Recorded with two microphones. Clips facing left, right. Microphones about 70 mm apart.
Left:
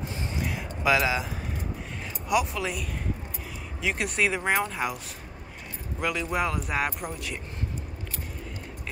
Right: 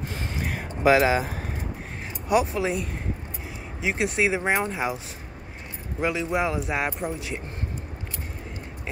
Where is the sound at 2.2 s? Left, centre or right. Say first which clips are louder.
Right 4 dB; right.